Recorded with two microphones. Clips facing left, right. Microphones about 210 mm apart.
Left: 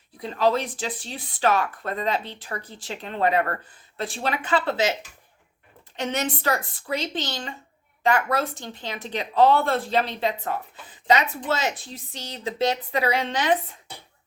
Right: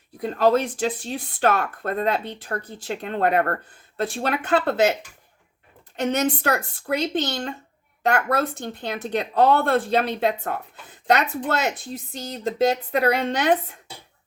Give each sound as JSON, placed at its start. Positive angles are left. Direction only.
{"t": 0.2, "sound": "a woman's voice", "side_deg": -50}
{"t": 1.1, "sound": "speech", "side_deg": -60}
{"t": 6.0, "sound": "a woman's voice", "side_deg": -45}